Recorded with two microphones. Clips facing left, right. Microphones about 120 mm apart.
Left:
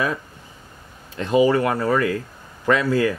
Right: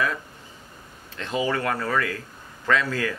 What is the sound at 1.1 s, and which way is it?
Speech, 15° left (ahead or behind).